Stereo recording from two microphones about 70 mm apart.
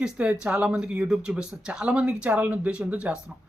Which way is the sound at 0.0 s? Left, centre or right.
Centre.